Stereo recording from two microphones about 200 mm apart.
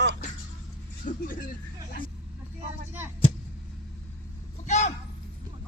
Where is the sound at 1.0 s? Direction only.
40° left (ahead or behind).